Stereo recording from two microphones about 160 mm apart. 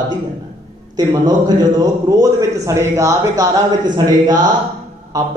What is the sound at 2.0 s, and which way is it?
Speech, 20° right (ahead or behind).